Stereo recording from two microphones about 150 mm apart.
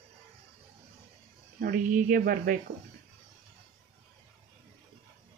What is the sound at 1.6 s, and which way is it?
Speech, 70° right (ahead or behind).